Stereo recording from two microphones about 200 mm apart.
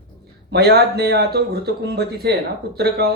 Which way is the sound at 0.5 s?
55° right (ahead or behind).